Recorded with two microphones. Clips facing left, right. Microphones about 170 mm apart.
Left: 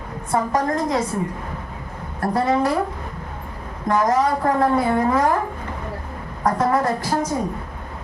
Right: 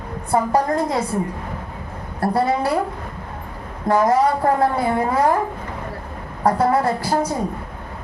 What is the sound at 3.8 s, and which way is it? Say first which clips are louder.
Speech: right 2 dB; 30° right (ahead or behind).